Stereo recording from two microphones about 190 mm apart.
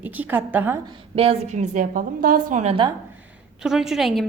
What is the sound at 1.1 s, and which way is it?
A woman's voice, 30° right (ahead or behind).